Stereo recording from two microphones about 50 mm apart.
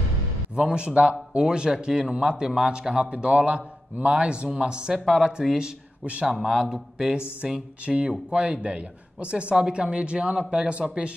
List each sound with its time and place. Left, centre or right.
0.6 s speech: centre